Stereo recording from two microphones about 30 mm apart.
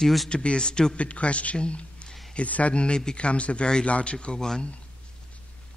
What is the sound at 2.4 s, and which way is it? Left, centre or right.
Speech, left.